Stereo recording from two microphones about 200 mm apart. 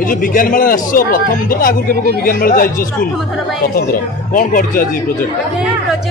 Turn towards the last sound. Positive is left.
turn(degrees=45)  # may be behind; listen again after turning